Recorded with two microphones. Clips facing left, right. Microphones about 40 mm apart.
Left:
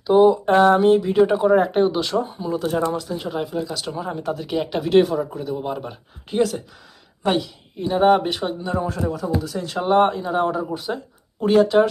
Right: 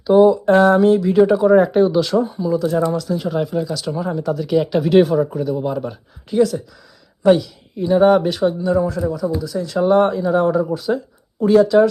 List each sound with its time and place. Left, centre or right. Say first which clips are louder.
0.3 s speech: right 2 dB; left
2.3 s speech: right 5 dB; left
3.1 s speech: right 5 dB; centre
4.1 s speech: right 7 dB; left
4.8 s speech: right 2 dB; centre
5.5 s speech: right 5 dB; centre
6.3 s speech: right 4 dB; left
7.8 s speech: right 4 dB; centre
8.8 s speech: right 4 dB; left
9.8 s speech: right 3 dB; left
11.3 s speech: right 3 dB; left